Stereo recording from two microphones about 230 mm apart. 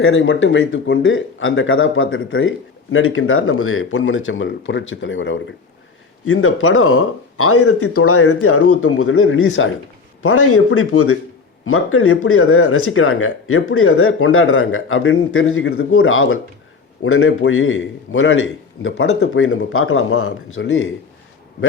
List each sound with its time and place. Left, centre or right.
0.0 s speech: left
6.2 s speech: left
10.2 s speech: left